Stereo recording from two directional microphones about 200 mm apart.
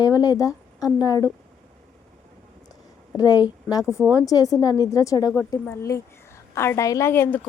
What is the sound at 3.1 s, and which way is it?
Speech, 20° left (ahead or behind).